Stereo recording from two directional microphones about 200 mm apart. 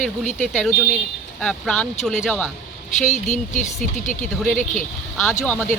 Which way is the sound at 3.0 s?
35° left (ahead or behind).